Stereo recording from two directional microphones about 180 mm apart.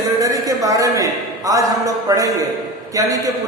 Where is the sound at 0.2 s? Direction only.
20° right (ahead or behind).